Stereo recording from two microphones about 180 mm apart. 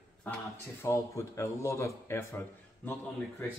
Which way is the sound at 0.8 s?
15° left (ahead or behind).